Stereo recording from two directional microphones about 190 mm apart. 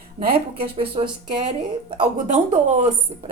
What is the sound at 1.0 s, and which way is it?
Speech, 30° right (ahead or behind).